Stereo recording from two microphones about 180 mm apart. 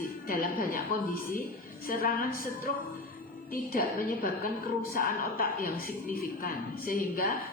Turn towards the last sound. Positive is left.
turn(degrees=50)  # may be behind; listen again after turning